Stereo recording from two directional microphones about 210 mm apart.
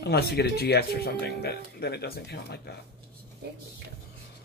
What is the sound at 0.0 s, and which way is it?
Speech, 50° left (ahead or behind).